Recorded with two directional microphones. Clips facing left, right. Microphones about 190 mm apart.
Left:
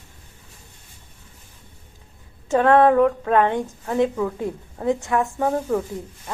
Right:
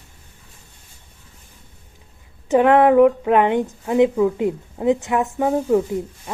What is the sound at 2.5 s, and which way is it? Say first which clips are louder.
A woman's voice: right 2 dB; 15° right (ahead or behind).